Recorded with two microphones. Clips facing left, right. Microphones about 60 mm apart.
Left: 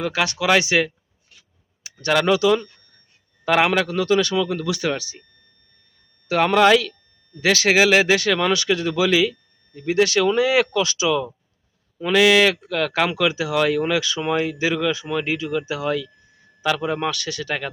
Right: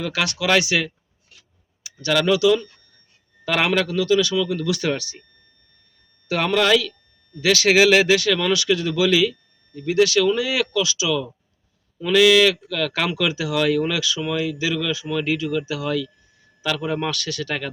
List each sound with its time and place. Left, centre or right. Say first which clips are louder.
0.0 s speech: left 2 dB; left
1.8 s a sound: left 1 dB; left
2.1 s speech: even; left
3.4 s a man's voice: left 2 dB; centre
3.8 s speech: even; left
4.6 s speech: right 1 dB; left
6.2 s speech: left 4 dB; centre
7.7 s speech: right 1 dB; centre
8.0 s speech: even; left
11.9 s speech: even; left
14.8 s speech: left 2 dB; left